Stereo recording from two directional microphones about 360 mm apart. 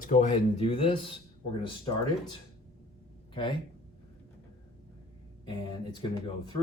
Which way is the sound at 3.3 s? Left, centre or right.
Centre.